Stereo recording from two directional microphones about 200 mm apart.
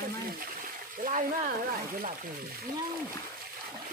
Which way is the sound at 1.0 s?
40° right (ahead or behind).